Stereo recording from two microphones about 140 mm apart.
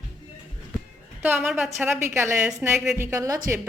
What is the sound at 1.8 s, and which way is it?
A woman's voice, 20° right (ahead or behind).